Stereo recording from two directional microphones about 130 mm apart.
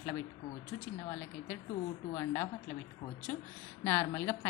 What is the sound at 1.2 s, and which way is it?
A woman's voice, 15° left (ahead or behind).